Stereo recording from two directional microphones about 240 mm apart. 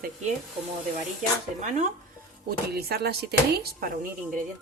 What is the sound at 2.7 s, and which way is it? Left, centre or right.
A woman's voice, right.